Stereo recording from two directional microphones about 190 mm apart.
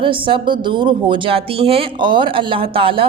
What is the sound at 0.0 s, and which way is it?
A woman's voice, 25° right (ahead or behind).